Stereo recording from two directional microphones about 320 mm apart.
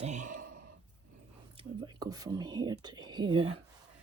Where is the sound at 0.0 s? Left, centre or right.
Right.